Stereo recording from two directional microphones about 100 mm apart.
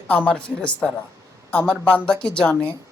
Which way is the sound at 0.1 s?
15° left (ahead or behind).